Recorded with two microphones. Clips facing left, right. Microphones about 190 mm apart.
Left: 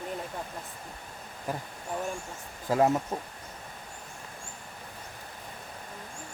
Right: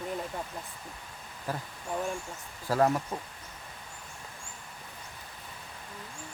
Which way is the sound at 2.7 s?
20° left (ahead or behind).